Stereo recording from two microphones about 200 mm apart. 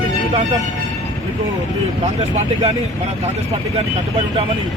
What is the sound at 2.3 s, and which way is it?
Speech, 35° right (ahead or behind).